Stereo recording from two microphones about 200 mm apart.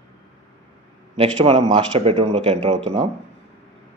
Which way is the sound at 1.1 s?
30° right (ahead or behind).